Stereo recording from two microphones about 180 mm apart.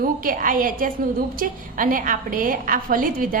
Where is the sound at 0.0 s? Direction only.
50° right (ahead or behind).